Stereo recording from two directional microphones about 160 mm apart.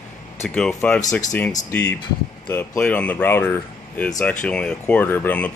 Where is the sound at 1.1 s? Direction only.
10° left (ahead or behind).